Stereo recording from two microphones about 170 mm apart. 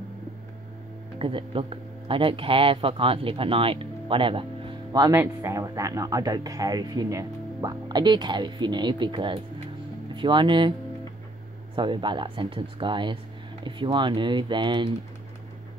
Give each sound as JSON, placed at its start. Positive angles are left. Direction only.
{"t": 1.2, "sound": "speech", "side_deg": -30}
{"t": 4.9, "sound": "speech", "side_deg": -20}
{"t": 11.7, "sound": "speech", "side_deg": -25}